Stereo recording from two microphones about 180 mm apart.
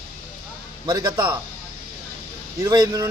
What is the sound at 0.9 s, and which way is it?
Speech, 20° right (ahead or behind).